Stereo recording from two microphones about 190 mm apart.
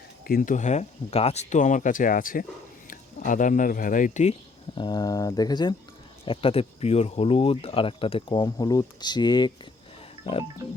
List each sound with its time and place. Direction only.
0.3 s speech: 45° left (ahead or behind); by 9.5 s 25° left (ahead or behind)